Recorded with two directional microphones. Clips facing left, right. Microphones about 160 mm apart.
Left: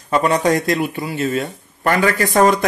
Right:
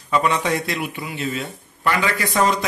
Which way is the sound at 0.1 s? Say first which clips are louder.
Left 4 dB; 45° left (ahead or behind).